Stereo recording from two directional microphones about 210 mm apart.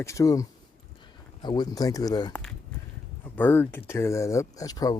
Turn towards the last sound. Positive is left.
turn(degrees=15)  # may be behind; listen again after turning